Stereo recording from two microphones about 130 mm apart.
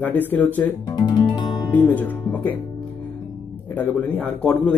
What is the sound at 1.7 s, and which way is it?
A man's voice, 15° left (ahead or behind).